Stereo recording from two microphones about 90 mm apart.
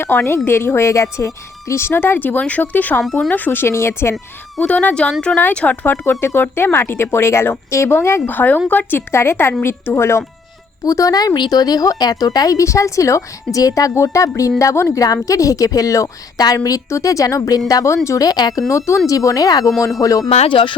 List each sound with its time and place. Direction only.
0.0 s speech: 25° left (ahead or behind)
3.0 s speech: 5° left (ahead or behind)
3.3 s speech: 20° left (ahead or behind)
4.6 s speech: 15° left (ahead or behind)
10.8 s speech: 40° left (ahead or behind)
18.7 s speech: 35° left (ahead or behind)
20.5 s speech: 70° left (ahead or behind)